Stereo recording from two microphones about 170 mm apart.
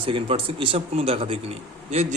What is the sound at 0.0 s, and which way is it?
A man's voice, 30° right (ahead or behind).